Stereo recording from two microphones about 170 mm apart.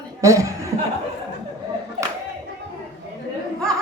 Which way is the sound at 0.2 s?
20° right (ahead or behind).